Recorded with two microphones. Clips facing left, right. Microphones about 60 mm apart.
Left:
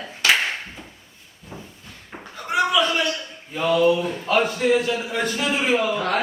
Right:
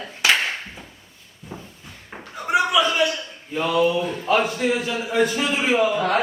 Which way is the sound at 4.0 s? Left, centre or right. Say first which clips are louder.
Even; centre.